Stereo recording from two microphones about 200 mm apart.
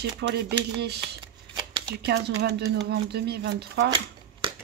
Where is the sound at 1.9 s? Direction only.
55° right (ahead or behind).